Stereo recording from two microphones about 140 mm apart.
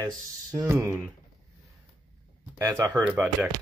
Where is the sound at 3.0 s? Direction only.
10° right (ahead or behind).